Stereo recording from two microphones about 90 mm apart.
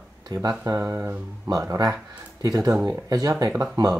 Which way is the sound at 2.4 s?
40° right (ahead or behind).